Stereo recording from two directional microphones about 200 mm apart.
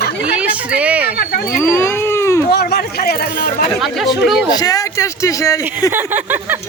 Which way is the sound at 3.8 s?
Centre (ahead or behind).